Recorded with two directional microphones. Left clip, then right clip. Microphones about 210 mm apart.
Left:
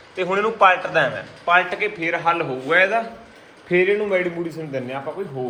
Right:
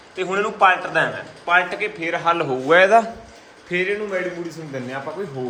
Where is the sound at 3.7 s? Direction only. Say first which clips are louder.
Left 4 dB; 20° left (ahead or behind).